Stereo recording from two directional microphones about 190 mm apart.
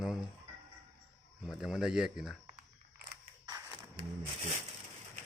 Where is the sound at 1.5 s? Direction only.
Centre (ahead or behind).